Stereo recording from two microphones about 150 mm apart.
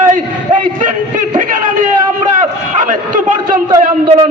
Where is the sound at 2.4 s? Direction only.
60° right (ahead or behind).